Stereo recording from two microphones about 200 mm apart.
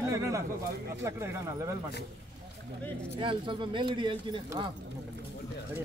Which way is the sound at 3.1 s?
25° right (ahead or behind).